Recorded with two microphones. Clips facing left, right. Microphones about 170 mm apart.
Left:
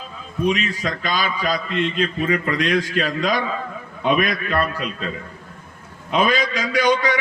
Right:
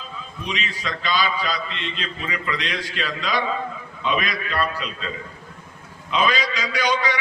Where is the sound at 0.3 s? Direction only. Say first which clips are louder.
Left 10 dB; 45° left (ahead or behind).